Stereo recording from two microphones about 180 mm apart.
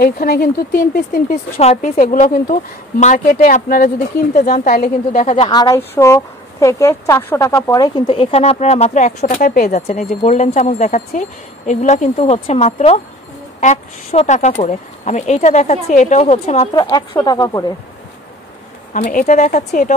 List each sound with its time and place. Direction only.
0.0 s speech: 55° left (ahead or behind)
1.6 s a woman's voice: 35° left (ahead or behind)
5.5 s speech: 20° left (ahead or behind)
16.7 s speech: 25° left (ahead or behind)
18.9 s a woman's voice: 45° left (ahead or behind)